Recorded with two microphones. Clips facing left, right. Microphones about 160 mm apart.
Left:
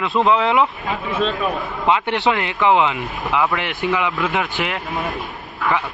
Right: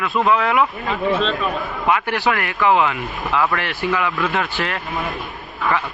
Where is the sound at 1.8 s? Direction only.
20° left (ahead or behind).